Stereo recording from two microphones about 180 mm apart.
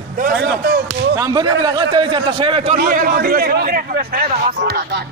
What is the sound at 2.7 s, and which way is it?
A man's voice, 50° right (ahead or behind).